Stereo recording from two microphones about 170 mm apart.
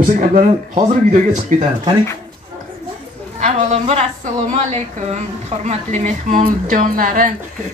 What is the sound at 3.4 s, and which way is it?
A woman's voice, 45° right (ahead or behind).